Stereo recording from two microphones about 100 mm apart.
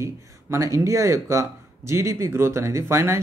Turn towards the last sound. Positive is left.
turn(degrees=-25)  # may be behind; listen again after turning